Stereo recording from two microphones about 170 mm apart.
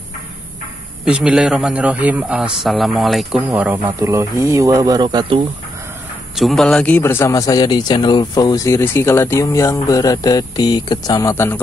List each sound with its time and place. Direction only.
1.0 s a man's voice: 5° right (ahead or behind); by 5.5 s 30° right (ahead or behind)
6.3 s a man's voice: centre (ahead or behind)